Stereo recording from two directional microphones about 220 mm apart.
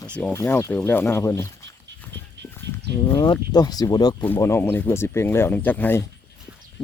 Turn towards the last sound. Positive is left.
turn(degrees=10)  # may be behind; listen again after turning